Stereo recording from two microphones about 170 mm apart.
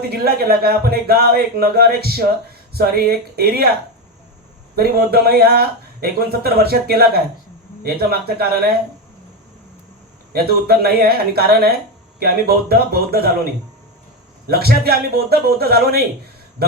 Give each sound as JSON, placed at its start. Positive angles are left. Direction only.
{"t": 0.1, "sound": "speech", "side_deg": -65}
{"t": 4.7, "sound": "speech", "side_deg": -65}
{"t": 10.3, "sound": "speech", "side_deg": -65}
{"t": 14.5, "sound": "a man's voice", "side_deg": -65}